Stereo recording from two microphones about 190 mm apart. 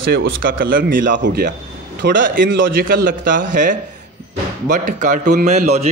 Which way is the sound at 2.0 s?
70° right (ahead or behind).